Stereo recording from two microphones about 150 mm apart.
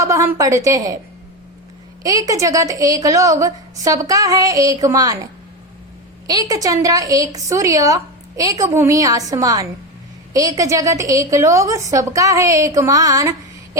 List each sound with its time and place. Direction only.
0.0 s a woman's voice: 20° right (ahead or behind)
2.0 s a woman's voice: 25° right (ahead or behind)